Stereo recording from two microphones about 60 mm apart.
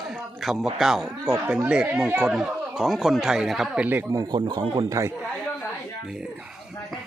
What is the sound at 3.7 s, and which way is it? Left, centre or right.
Speech, right.